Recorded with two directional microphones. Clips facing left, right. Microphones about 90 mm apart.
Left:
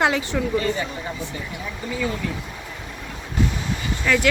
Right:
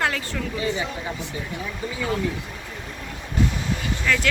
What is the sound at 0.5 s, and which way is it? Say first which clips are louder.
Speech: left 1 dB; 10° right (ahead or behind).